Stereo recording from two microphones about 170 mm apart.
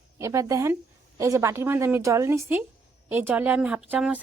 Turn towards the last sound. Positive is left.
turn(degrees=-5)  # may be behind; listen again after turning